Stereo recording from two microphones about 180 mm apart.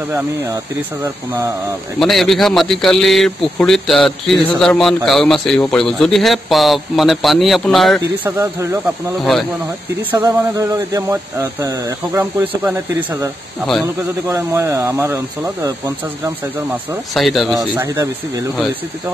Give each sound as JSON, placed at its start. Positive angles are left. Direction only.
{"t": 1.0, "sound": "speech", "side_deg": -15}
{"t": 2.0, "sound": "speech", "side_deg": 0}
{"t": 8.3, "sound": "speech", "side_deg": -15}
{"t": 9.2, "sound": "speech", "side_deg": 0}
{"t": 10.1, "sound": "speech", "side_deg": -20}
{"t": 17.1, "sound": "speech", "side_deg": 0}
{"t": 17.6, "sound": "speech", "side_deg": -15}